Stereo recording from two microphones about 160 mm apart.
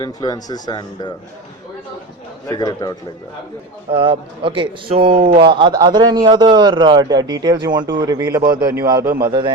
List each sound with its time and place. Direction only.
0.0 s speech: 25° left (ahead or behind)
2.5 s speech: 25° left (ahead or behind)
3.9 s a man's voice: 30° right (ahead or behind)
5.1 s a man's voice: 55° right (ahead or behind)
5.4 s a man's voice: 30° right (ahead or behind)
8.4 s a man's voice: 65° right (ahead or behind)
8.6 s a man's voice: 20° right (ahead or behind)